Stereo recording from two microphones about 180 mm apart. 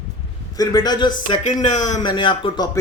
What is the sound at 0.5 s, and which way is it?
Speech, 20° left (ahead or behind).